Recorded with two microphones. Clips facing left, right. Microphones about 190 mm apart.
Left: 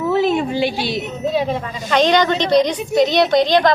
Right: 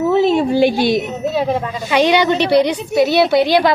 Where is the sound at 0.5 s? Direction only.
50° right (ahead or behind).